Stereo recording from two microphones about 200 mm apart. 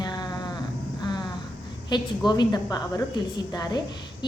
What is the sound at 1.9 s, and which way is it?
A woman's voice, 20° left (ahead or behind).